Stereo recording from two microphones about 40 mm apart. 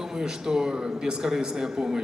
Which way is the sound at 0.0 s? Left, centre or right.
Centre.